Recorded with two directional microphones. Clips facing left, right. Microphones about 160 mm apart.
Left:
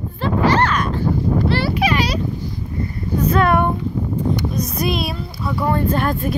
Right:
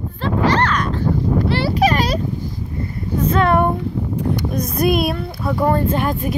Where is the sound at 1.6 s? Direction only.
40° right (ahead or behind).